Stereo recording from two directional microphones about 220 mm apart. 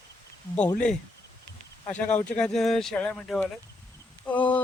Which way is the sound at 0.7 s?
5° left (ahead or behind).